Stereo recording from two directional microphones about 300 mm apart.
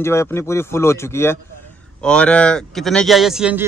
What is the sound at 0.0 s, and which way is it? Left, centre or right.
A man's voice, centre.